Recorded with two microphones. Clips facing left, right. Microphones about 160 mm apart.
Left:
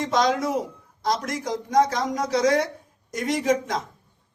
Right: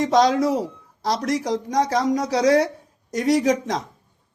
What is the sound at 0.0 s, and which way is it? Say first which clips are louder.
Speech: right 5 dB; 35° right (ahead or behind).